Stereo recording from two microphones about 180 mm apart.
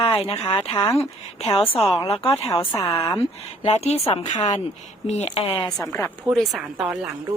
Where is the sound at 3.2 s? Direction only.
35° left (ahead or behind).